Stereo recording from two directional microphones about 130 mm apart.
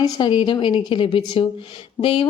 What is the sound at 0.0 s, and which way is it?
A woman's voice, 40° left (ahead or behind).